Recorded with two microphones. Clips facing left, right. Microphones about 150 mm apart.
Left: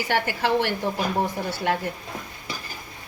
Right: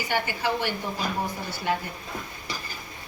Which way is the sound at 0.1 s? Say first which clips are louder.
Left 4 dB; 75° left (ahead or behind).